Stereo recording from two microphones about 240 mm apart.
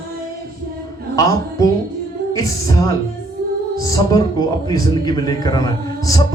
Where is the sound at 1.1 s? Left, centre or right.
Centre.